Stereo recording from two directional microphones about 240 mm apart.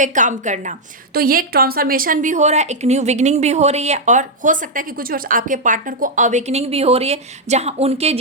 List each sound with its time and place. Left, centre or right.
0.0 s a woman's voice: right